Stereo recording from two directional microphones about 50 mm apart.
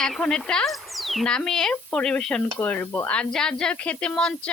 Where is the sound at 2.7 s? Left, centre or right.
Left.